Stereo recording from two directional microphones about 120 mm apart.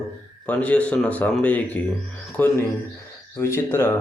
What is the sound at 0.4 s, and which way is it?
A man's voice, 10° left (ahead or behind).